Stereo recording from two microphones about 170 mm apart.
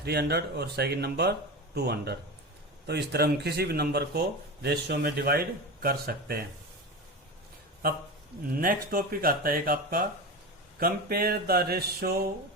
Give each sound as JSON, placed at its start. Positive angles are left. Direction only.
{"t": 0.0, "sound": "speech", "side_deg": -70}
{"t": 8.5, "sound": "speech", "side_deg": -55}